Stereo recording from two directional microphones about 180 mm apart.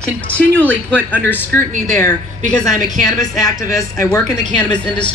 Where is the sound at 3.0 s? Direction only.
20° left (ahead or behind).